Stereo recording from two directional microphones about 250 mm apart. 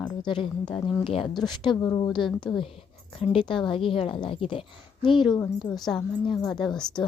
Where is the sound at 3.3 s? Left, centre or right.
Centre.